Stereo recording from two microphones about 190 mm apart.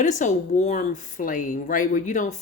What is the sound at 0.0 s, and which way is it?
Speech, 40° left (ahead or behind).